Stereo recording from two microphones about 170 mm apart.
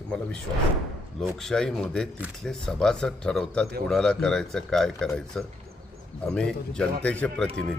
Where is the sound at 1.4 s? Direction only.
5° left (ahead or behind).